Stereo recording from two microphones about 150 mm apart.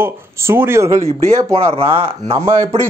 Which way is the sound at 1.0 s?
40° right (ahead or behind).